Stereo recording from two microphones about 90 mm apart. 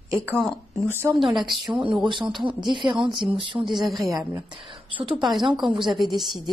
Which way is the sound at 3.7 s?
Centre (ahead or behind).